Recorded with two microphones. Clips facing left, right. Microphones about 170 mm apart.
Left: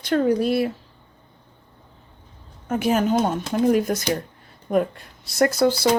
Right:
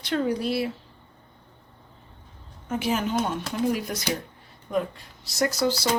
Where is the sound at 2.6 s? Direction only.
50° left (ahead or behind).